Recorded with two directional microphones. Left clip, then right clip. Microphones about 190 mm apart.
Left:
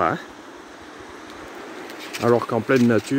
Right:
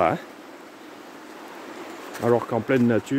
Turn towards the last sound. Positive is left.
turn(degrees=5)  # may be behind; listen again after turning